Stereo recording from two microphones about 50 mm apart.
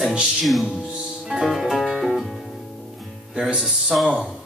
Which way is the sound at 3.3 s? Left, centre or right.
Centre.